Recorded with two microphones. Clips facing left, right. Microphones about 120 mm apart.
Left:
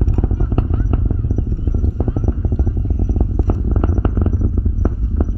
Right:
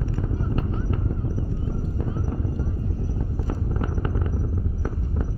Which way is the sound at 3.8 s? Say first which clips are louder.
Left 10 dB; 40° left (ahead or behind).